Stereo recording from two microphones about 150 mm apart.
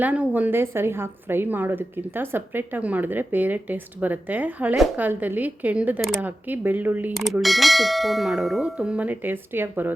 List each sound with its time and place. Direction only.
0.0 s a woman's voice: 10° right (ahead or behind)
6.0 s bell: centre (ahead or behind)
6.2 s a woman's voice: 10° right (ahead or behind)
7.1 s bell: centre (ahead or behind)